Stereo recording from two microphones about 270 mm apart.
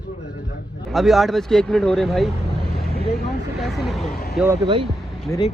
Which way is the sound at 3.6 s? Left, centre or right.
Centre.